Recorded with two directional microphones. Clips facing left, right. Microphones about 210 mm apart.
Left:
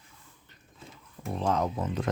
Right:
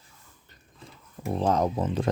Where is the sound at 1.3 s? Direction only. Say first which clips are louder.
Right 4 dB; 35° right (ahead or behind).